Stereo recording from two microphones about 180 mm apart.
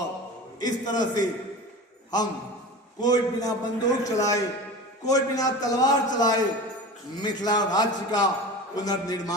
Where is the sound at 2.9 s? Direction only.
20° left (ahead or behind).